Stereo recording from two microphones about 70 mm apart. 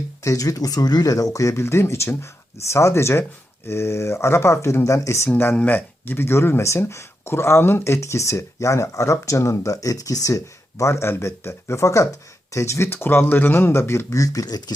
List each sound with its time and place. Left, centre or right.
0.2 s speech: left
1.6 s speech: left
5.3 s speech: left